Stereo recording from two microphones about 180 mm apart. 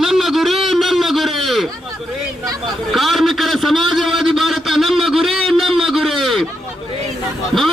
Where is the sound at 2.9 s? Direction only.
Centre (ahead or behind).